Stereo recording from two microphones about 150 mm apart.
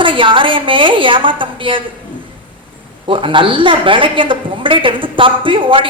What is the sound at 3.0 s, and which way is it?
A woman's voice, 35° right (ahead or behind).